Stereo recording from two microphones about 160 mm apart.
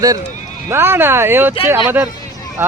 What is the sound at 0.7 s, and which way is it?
A man's voice, 15° right (ahead or behind).